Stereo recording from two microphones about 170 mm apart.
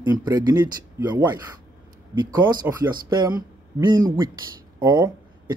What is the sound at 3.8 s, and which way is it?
Speech, 25° right (ahead or behind).